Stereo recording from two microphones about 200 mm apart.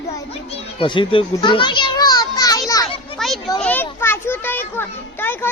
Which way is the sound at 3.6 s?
10° left (ahead or behind).